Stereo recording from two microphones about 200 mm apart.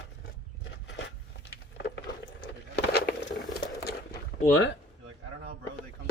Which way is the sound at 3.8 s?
50° left (ahead or behind).